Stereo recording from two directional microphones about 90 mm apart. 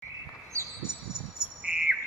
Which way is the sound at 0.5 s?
30° right (ahead or behind).